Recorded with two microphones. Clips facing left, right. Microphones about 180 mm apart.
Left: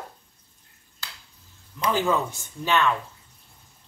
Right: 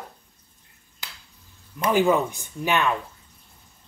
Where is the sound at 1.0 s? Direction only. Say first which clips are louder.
Even; 20° right (ahead or behind).